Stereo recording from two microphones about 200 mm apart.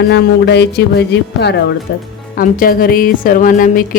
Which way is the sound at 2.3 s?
45° left (ahead or behind).